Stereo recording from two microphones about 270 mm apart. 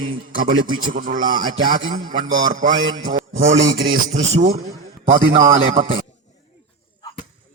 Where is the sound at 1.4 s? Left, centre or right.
Centre.